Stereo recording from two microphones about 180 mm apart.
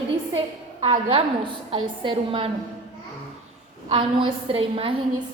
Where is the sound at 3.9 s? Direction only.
25° right (ahead or behind).